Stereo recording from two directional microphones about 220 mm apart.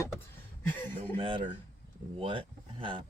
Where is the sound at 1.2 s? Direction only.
25° right (ahead or behind).